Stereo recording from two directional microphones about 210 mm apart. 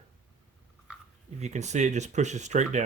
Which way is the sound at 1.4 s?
35° right (ahead or behind).